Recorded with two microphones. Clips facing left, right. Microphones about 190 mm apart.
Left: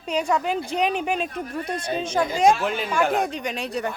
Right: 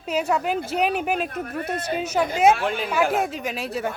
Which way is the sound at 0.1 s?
5° right (ahead or behind).